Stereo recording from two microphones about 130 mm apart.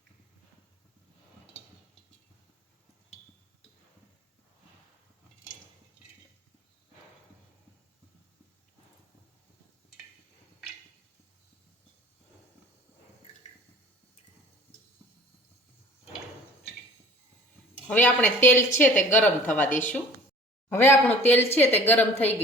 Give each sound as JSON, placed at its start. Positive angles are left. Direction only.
{"t": 17.8, "sound": "a woman's voice", "side_deg": 10}